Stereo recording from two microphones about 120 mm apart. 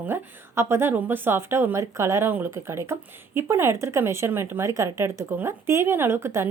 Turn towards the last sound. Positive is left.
turn(degrees=-20)  # may be behind; listen again after turning